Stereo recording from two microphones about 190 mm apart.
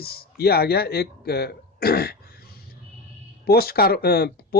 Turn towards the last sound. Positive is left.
turn(degrees=55)  # may be behind; listen again after turning